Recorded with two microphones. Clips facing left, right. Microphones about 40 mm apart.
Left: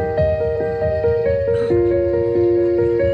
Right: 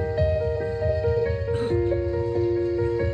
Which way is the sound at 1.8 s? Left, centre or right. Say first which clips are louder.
Left 8 dB; left.